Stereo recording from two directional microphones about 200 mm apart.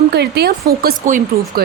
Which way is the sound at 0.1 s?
55° right (ahead or behind).